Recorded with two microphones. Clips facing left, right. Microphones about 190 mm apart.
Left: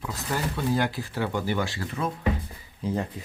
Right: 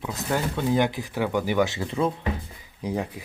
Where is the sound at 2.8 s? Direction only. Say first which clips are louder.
Even; 10° right (ahead or behind).